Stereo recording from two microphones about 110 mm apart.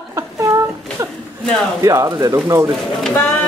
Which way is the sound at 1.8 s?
30° right (ahead or behind).